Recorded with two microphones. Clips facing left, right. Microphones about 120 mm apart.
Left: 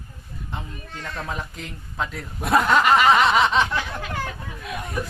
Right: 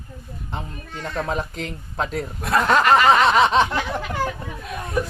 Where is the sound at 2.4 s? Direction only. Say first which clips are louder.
Even; 10° left (ahead or behind).